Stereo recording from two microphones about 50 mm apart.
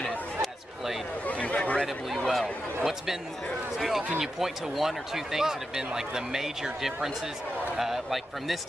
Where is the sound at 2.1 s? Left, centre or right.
Centre.